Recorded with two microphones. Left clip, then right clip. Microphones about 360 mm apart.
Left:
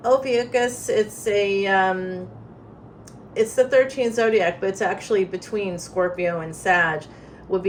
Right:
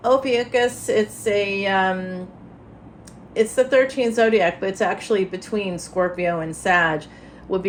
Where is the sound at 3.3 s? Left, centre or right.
Centre.